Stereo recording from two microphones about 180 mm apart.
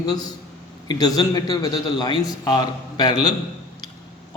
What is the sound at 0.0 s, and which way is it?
A man's voice, 20° left (ahead or behind).